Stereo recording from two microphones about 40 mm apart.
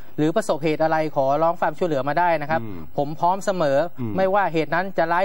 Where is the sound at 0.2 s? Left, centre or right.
Centre.